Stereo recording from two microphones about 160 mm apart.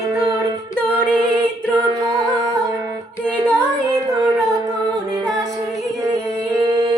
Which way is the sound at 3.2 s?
5° left (ahead or behind).